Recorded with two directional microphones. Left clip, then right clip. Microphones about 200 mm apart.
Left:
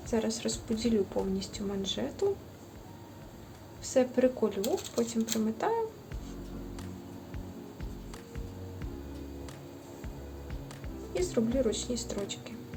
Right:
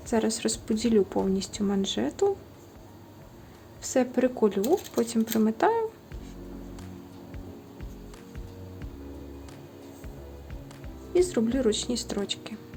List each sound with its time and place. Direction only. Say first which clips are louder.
0.1 s speech: right 5 dB; 55° right (ahead or behind)
3.8 s a woman's voice: right 1 dB; 55° right (ahead or behind)
11.2 s a woman's voice: right 5 dB; 50° right (ahead or behind)